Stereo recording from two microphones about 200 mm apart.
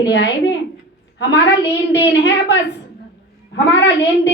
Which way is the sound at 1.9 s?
60° left (ahead or behind).